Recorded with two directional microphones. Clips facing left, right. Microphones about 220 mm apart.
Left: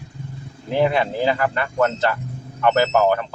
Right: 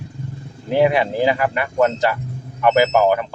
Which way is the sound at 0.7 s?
15° right (ahead or behind).